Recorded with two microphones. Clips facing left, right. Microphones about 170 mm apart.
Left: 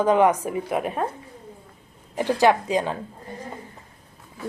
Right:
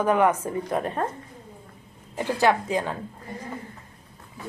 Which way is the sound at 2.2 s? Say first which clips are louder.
Left 3 dB; 15° left (ahead or behind).